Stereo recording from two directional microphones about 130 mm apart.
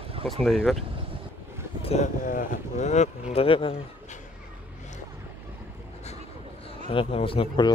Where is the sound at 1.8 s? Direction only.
50° left (ahead or behind).